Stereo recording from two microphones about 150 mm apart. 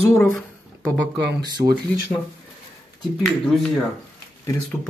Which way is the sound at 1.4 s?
25° right (ahead or behind).